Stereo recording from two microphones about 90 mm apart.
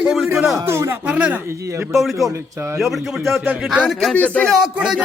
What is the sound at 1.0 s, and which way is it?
Speech, 15° right (ahead or behind).